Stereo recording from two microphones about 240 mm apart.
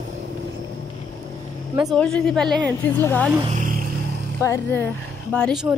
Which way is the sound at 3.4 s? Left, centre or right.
Right.